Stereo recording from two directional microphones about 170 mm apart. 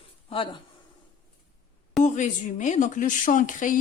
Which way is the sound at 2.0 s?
45° left (ahead or behind).